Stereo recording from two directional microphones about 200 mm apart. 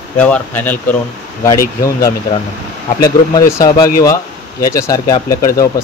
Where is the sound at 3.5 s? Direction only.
20° left (ahead or behind).